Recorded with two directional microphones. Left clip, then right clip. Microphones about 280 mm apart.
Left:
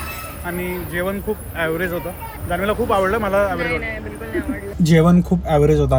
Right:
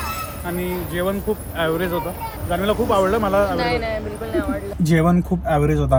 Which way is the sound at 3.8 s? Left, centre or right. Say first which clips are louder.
Right 3 dB; centre.